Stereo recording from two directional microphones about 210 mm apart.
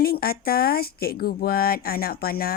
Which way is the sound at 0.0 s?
45° left (ahead or behind).